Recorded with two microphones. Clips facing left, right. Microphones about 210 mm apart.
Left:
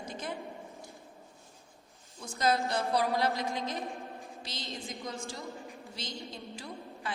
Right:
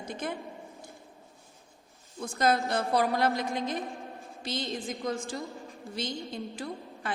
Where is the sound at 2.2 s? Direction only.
55° right (ahead or behind).